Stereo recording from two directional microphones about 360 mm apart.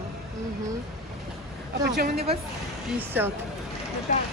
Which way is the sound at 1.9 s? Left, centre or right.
Right.